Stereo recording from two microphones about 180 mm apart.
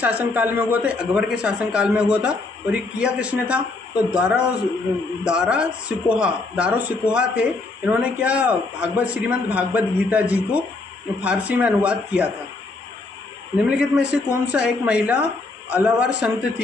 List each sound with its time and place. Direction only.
0.2 s speech: 10° right (ahead or behind)
13.6 s speech: 5° right (ahead or behind)